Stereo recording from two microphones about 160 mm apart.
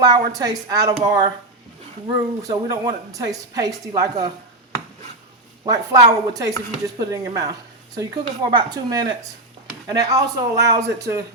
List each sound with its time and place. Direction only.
0.0 s a woman's voice: 25° right (ahead or behind)
5.6 s a woman's voice: 20° right (ahead or behind)